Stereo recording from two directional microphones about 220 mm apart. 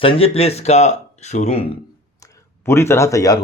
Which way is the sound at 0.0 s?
25° left (ahead or behind).